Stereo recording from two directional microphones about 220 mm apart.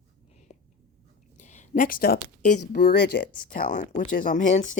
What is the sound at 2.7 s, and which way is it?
Speech, 50° left (ahead or behind).